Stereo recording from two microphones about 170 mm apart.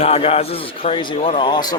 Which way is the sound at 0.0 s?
35° left (ahead or behind).